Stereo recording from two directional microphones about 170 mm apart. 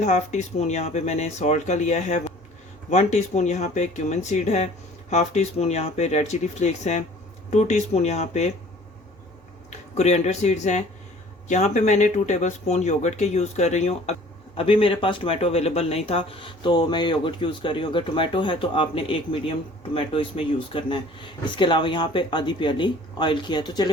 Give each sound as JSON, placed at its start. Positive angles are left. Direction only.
{"t": 0.0, "sound": "speech", "side_deg": 45}
{"t": 9.6, "sound": "speech", "side_deg": 40}